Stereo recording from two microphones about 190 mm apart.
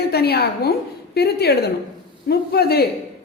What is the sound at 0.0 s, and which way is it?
A woman's voice, 55° left (ahead or behind).